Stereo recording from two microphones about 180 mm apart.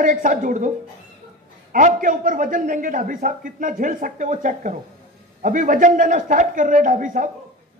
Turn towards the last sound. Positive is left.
turn(degrees=-45)  # may be behind; listen again after turning